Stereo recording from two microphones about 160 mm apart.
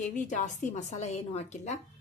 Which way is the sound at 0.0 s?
50° left (ahead or behind).